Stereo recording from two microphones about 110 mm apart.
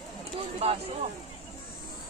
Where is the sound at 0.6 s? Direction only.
70° right (ahead or behind).